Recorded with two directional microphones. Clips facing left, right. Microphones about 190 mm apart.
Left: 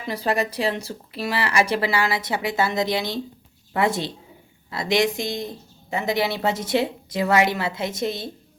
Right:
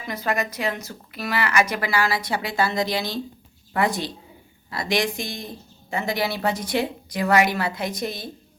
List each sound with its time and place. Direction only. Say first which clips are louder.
0.0 s a woman's voice: left 2 dB; 30° left (ahead or behind)